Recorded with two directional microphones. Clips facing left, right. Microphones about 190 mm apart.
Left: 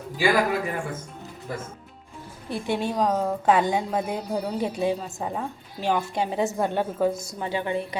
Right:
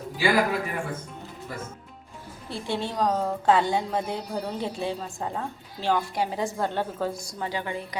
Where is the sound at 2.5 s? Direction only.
15° left (ahead or behind).